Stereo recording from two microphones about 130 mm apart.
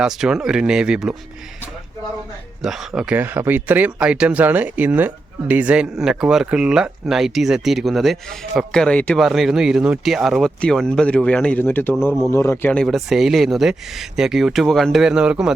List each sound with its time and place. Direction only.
0.0 s speech: 5° right (ahead or behind)
2.6 s speech: 5° right (ahead or behind)
9.1 s a man's voice: centre (ahead or behind); by 12.7 s 20° left (ahead or behind)
12.7 s speech: 5° left (ahead or behind)